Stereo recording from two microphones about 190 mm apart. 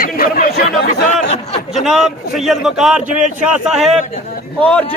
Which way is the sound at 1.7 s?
Centre (ahead or behind).